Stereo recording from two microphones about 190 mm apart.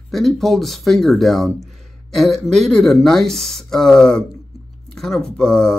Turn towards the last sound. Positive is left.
turn(degrees=5)  # may be behind; listen again after turning